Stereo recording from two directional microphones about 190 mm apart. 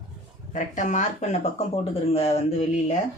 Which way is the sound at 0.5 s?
40° left (ahead or behind).